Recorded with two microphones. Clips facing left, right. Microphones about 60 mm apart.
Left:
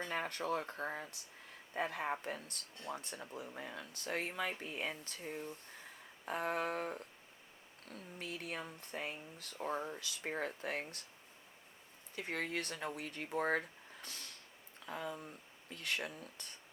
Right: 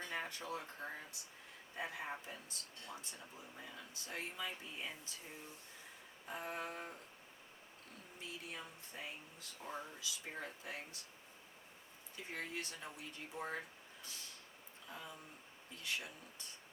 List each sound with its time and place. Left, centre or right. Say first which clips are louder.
0.1 s speech: left 7 dB; left
8.2 s speech: left 5 dB; left
12.1 s speech: left 6 dB; left
14.0 s a sound: left 3 dB; left
14.8 s speech: left 8 dB; left